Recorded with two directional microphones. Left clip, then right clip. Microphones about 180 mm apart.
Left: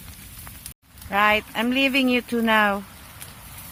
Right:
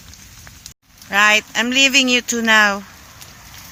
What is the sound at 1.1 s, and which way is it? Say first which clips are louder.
Speech: right 6 dB; 15° right (ahead or behind).